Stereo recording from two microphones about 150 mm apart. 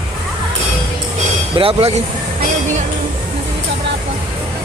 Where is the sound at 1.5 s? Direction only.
35° right (ahead or behind).